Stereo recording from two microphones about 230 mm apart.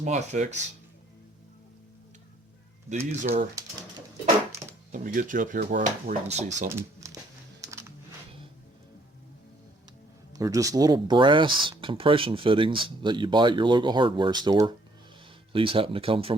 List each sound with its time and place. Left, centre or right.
0.0 s speech: right
3.2 s speech: right
4.5 s speech: right
6.7 s speech: centre
7.7 s music: centre
10.3 s speech: centre